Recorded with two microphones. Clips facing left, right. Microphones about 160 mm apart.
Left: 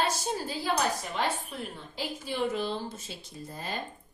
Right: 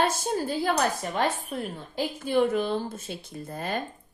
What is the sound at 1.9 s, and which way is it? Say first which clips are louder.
A woman's voice: right 11 dB; 50° right (ahead or behind).